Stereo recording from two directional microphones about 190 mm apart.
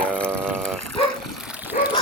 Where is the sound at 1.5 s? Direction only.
10° right (ahead or behind).